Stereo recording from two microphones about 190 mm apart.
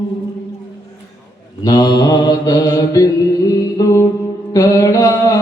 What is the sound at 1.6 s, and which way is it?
Mantra, 20° left (ahead or behind).